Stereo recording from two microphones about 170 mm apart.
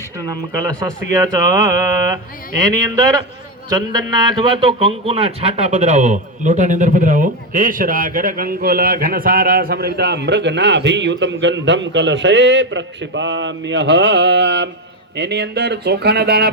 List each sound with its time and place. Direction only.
0.6 s speech: 25° right (ahead or behind)
2.7 s a man's voice: 25° right (ahead or behind); by 14.7 s 90° right
15.1 s speech: 80° right